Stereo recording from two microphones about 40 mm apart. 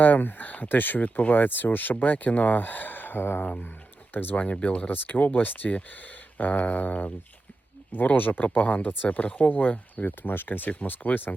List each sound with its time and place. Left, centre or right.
0.0 s speech: left
4.6 s a sound: left
4.9 s speech: left
6.3 s a sound: left
7.9 s speech: left
9.5 s speech: left
10.1 s speech: left